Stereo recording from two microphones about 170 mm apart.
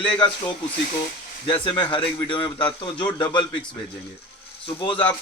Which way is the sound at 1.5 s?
30° left (ahead or behind).